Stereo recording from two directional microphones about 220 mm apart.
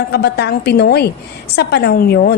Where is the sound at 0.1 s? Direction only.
50° left (ahead or behind).